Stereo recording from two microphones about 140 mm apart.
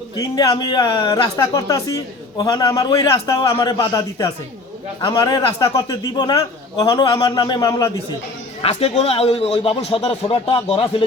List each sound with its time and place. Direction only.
0.2 s a man's voice: 30° left (ahead or behind)
8.6 s speech: 50° left (ahead or behind)